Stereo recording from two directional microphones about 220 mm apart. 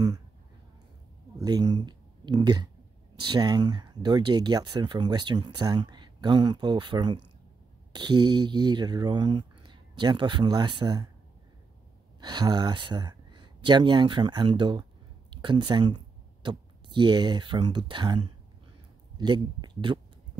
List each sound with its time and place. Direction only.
1.4 s speech: 20° right (ahead or behind)
12.2 s speech: 20° right (ahead or behind)